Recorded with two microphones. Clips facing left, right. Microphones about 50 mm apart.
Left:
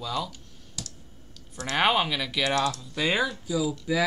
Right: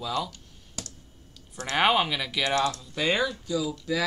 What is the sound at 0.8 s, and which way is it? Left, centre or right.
Clicking, right.